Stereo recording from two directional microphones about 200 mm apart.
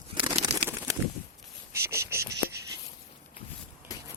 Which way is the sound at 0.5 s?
35° right (ahead or behind).